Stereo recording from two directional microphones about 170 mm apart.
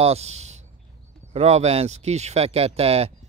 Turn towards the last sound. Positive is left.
turn(degrees=-35)  # may be behind; listen again after turning